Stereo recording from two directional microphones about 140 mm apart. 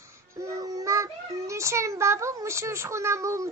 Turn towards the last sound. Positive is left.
turn(degrees=-20)  # may be behind; listen again after turning